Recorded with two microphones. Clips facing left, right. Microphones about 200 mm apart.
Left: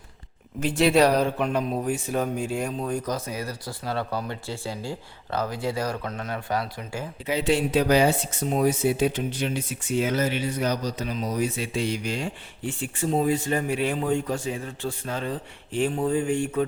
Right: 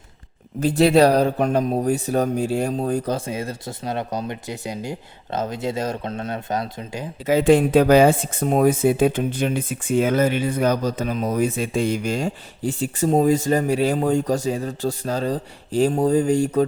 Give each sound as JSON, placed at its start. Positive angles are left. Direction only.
{"t": 0.6, "sound": "speech", "side_deg": -35}
{"t": 7.3, "sound": "speech", "side_deg": -50}